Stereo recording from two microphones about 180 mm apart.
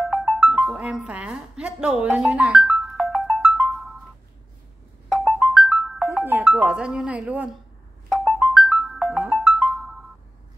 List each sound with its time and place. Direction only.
0.0 s music: 5° left (ahead or behind)
5.2 s music: 5° left (ahead or behind)
8.1 s music: 5° left (ahead or behind)